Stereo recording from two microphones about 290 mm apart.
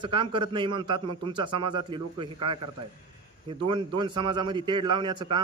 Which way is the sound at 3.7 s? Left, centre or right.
Centre.